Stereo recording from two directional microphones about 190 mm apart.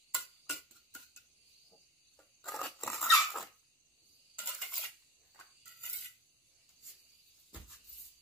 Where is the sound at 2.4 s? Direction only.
Centre (ahead or behind).